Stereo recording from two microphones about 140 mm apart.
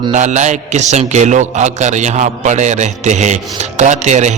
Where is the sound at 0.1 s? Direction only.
60° right (ahead or behind).